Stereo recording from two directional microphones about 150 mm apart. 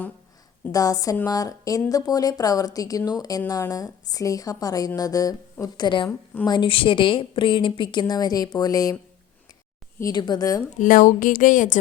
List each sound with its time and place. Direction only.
0.7 s a woman's voice: 25° left (ahead or behind)
10.0 s speech: 30° left (ahead or behind)
10.8 s speech: 60° left (ahead or behind)